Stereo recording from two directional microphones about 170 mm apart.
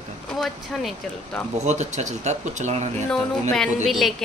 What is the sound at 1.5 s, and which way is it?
Speech, 40° right (ahead or behind).